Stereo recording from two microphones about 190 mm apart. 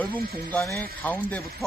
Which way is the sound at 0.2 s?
50° right (ahead or behind).